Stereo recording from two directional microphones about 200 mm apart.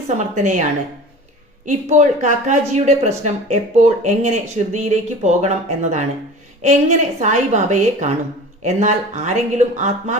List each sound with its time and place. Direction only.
0.1 s speech: 35° right (ahead or behind)
1.6 s speech: 35° right (ahead or behind)